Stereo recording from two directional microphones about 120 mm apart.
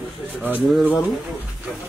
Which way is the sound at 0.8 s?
15° left (ahead or behind).